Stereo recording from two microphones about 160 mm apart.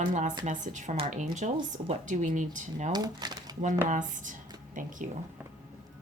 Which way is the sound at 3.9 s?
50° right (ahead or behind).